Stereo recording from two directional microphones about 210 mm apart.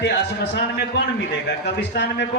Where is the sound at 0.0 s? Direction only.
55° left (ahead or behind).